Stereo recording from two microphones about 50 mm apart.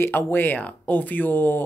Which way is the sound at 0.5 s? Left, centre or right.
Left.